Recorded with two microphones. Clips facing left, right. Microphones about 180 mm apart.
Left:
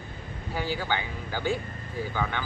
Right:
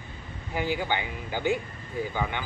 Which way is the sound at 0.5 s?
15° right (ahead or behind).